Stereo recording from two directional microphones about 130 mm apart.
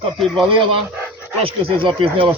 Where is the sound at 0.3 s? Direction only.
40° right (ahead or behind).